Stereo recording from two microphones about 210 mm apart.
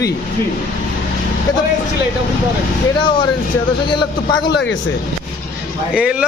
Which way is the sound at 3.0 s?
20° left (ahead or behind).